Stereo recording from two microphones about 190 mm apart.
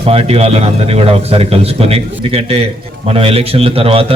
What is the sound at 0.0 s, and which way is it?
Speech, 30° right (ahead or behind).